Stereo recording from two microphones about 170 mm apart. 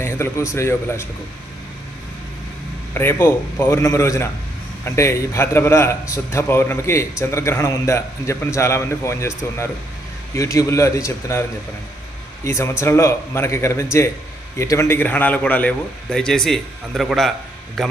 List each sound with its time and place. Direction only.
0.0 s a man's voice: 15° left (ahead or behind)
2.9 s a man's voice: 15° left (ahead or behind)
12.5 s a man's voice: 15° left (ahead or behind)